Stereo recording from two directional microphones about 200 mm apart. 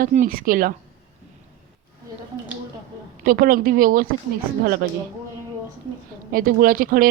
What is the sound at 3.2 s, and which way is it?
Speech, 45° right (ahead or behind).